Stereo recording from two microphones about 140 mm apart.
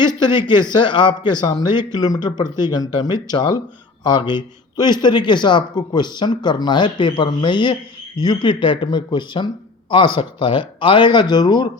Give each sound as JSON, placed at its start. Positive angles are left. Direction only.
{"t": 0.2, "sound": "a man's voice", "side_deg": 35}